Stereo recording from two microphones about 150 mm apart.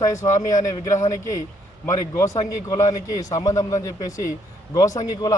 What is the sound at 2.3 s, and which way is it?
Speech, 50° left (ahead or behind).